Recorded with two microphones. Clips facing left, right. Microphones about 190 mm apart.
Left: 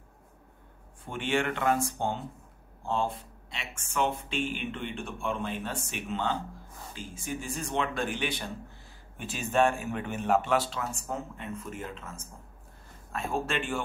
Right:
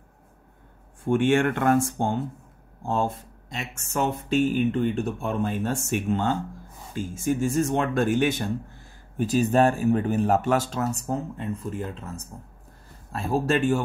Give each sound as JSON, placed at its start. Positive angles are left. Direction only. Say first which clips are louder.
{"t": 1.0, "sound": "speech", "louder": "right 9 dB", "side_deg": -50}